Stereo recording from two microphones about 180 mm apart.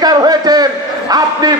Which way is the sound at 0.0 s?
20° right (ahead or behind).